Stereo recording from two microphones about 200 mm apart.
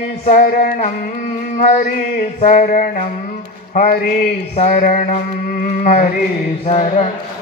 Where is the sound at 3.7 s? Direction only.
45° left (ahead or behind).